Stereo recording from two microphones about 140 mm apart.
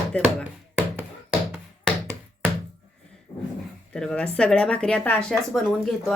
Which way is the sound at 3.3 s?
10° left (ahead or behind).